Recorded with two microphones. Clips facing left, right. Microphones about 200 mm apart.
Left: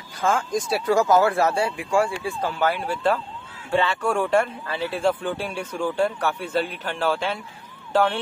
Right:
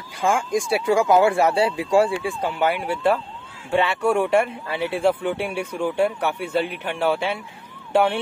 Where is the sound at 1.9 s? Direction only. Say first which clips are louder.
Right 4 dB; 30° right (ahead or behind).